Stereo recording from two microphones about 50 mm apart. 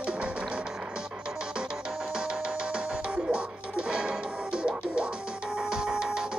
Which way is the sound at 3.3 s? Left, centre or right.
Centre.